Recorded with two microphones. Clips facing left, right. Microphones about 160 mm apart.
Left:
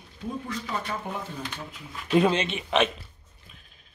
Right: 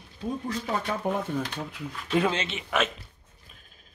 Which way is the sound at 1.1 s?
50° right (ahead or behind).